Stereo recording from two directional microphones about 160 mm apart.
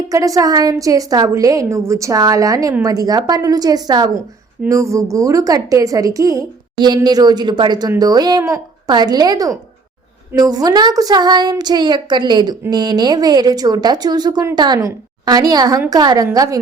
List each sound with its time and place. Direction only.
0.1 s a woman's voice: 20° right (ahead or behind)